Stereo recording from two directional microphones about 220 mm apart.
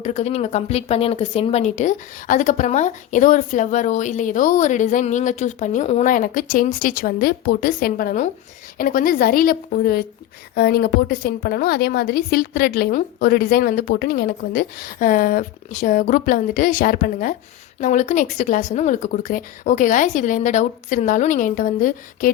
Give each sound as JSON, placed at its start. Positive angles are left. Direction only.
{"t": 0.0, "sound": "a woman's voice", "side_deg": 30}